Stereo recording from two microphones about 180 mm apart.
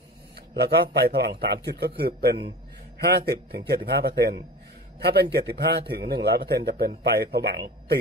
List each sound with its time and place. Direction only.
0.6 s a man's voice: 65° right (ahead or behind)